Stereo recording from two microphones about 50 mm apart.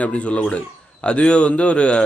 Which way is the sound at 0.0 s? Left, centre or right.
Left.